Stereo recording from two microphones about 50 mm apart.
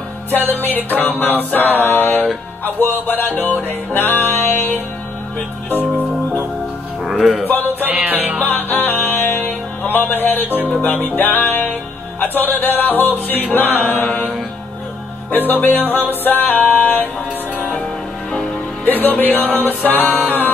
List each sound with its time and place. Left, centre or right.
0.5 s music: left
7.0 s music: centre
7.4 s music: left
7.8 s music: right
8.6 s music: left
15.3 s music: left
19.0 s music: left